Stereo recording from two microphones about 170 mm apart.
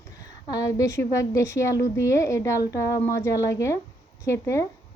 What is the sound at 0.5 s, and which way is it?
A woman's voice, 20° left (ahead or behind).